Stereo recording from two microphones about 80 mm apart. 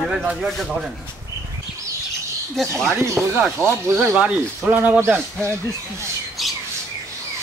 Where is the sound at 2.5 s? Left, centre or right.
Centre.